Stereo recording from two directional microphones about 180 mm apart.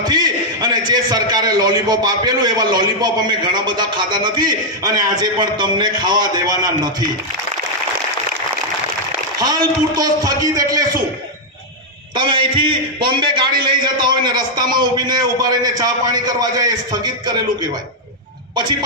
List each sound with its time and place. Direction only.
0.0 s a man's voice: 25° right (ahead or behind)
9.4 s a man's voice: 20° right (ahead or behind)
12.1 s a man's voice: 25° right (ahead or behind)
18.5 s a man's voice: 25° right (ahead or behind)